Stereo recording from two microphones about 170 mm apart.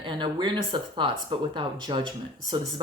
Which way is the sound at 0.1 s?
25° right (ahead or behind).